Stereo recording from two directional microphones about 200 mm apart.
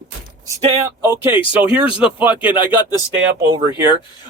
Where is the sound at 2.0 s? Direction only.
5° right (ahead or behind).